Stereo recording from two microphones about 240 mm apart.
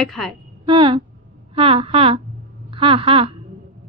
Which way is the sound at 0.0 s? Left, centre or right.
Centre.